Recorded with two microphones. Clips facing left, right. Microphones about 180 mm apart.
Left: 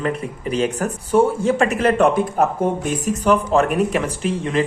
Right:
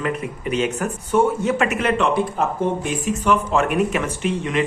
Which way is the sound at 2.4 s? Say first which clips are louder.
Left 3 dB; 50° left (ahead or behind).